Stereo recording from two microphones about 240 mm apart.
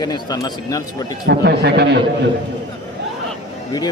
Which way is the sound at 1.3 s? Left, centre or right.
Right.